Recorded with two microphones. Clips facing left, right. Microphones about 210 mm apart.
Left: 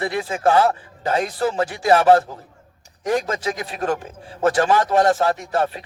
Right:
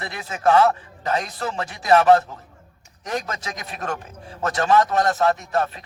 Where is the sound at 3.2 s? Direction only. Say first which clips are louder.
Left 7 dB; 30° left (ahead or behind).